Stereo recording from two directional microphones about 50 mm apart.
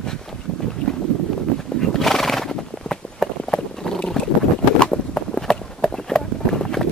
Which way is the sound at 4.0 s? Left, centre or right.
Left.